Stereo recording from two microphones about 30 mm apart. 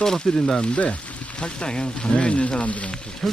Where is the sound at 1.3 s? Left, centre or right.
Left.